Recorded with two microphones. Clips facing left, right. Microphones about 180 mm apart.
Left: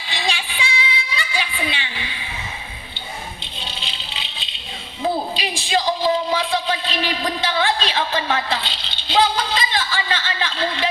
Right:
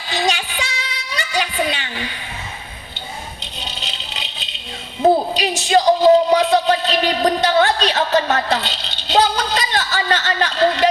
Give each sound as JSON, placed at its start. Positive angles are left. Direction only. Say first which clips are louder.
{"t": 0.1, "sound": "music", "louder": "right 6 dB", "side_deg": -40}
{"t": 3.8, "sound": "vehicle", "louder": "right 2 dB", "side_deg": -45}
{"t": 5.0, "sound": "a sound", "louder": "right 8 dB", "side_deg": -45}